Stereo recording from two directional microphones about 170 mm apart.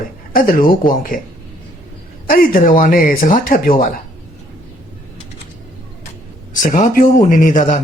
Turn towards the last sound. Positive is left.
turn(degrees=50)  # may be behind; listen again after turning